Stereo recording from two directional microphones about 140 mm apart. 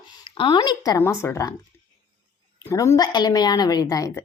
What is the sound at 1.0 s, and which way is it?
Speech, 20° left (ahead or behind).